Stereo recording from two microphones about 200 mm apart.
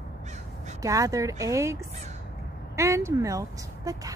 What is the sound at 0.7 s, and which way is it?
Speech, 15° right (ahead or behind).